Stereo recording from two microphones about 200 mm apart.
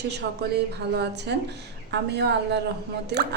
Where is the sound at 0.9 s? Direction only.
55° right (ahead or behind).